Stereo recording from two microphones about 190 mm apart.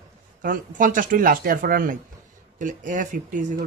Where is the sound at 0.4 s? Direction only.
45° right (ahead or behind).